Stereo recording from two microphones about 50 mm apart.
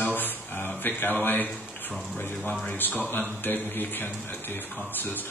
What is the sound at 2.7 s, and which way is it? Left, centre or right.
Speech, left.